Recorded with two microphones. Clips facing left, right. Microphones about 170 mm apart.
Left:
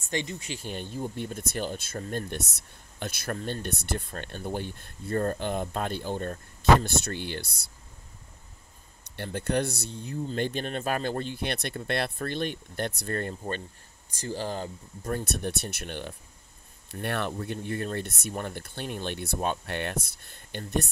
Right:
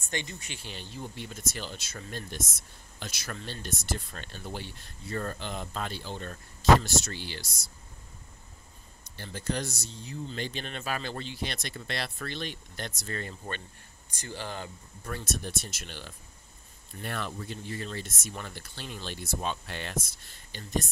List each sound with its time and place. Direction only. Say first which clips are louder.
0.1 s speech: left 5 dB; 25° left (ahead or behind)
0.6 s speech: left 8 dB; 50° left (ahead or behind)
9.0 s speech: left 3 dB; 65° left (ahead or behind)
14.1 s speech: left 6 dB; 35° left (ahead or behind)
15.2 s speech: left 4 dB; 60° left (ahead or behind)